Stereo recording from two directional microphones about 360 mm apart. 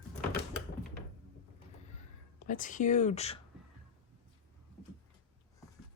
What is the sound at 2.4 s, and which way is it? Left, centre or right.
Speech, left.